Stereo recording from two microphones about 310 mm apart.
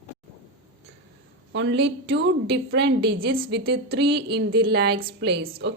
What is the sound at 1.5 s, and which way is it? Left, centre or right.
Speech, right.